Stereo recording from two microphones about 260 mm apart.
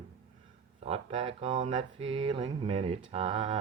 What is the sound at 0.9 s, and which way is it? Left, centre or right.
Speech, right.